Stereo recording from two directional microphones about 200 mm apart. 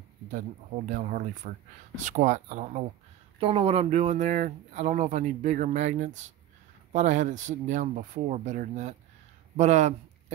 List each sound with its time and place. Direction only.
0.8 s speech: 40° right (ahead or behind)